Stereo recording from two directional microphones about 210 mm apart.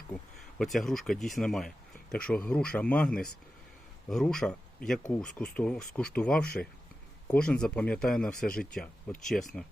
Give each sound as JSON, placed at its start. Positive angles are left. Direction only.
{"t": 0.6, "sound": "speech", "side_deg": 0}